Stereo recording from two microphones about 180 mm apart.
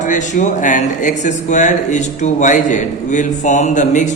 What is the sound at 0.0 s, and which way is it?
A man's voice, 45° left (ahead or behind).